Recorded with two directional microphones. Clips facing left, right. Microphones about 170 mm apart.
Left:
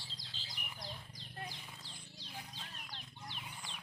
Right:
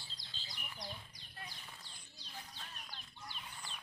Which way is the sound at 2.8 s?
90° left.